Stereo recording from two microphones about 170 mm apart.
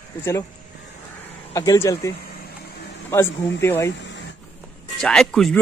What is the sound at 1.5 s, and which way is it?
Speech, 20° left (ahead or behind).